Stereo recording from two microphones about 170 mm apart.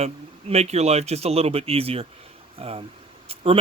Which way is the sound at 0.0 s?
40° right (ahead or behind).